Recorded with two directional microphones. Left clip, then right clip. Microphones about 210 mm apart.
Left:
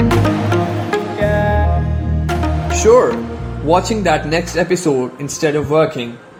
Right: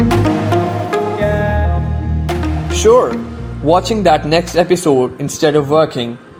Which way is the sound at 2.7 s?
25° right (ahead or behind).